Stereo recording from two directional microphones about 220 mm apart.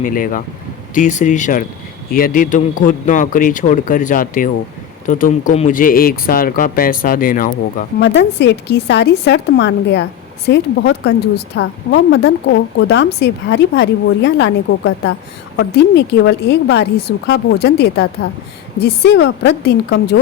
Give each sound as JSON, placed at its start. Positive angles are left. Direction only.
{"t": 0.0, "sound": "speech", "side_deg": 40}
{"t": 7.9, "sound": "a woman's voice", "side_deg": 50}